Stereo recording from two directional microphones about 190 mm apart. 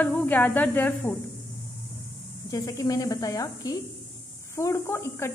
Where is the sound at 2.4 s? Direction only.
15° left (ahead or behind).